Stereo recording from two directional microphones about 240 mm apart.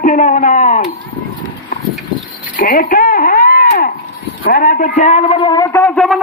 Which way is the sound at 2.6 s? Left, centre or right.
Left.